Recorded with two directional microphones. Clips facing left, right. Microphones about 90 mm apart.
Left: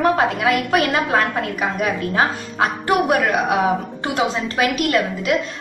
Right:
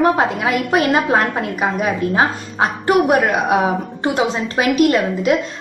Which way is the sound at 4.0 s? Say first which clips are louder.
Right 5 dB; 25° right (ahead or behind).